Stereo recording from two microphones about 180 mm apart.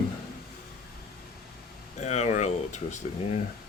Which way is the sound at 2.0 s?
40° left (ahead or behind).